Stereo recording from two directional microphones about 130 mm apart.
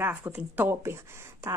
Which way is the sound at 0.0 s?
15° right (ahead or behind).